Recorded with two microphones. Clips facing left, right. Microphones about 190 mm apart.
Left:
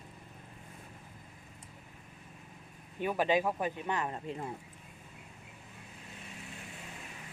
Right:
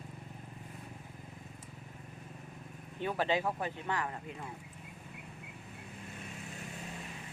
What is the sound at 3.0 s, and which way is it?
Speech, 15° left (ahead or behind).